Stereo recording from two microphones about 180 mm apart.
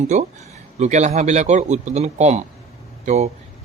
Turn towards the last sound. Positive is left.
turn(degrees=-40)  # may be behind; listen again after turning